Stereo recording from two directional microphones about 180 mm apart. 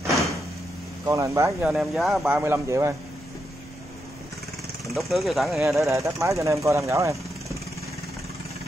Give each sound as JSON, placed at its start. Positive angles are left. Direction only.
{"t": 1.0, "sound": "speech", "side_deg": -15}
{"t": 1.7, "sound": "speech", "side_deg": 0}
{"t": 4.9, "sound": "speech", "side_deg": 0}
{"t": 5.8, "sound": "speech", "side_deg": -15}